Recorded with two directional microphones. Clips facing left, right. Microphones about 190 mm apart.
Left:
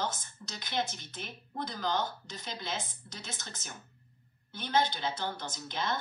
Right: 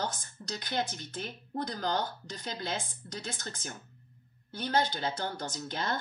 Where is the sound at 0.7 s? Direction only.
45° right (ahead or behind).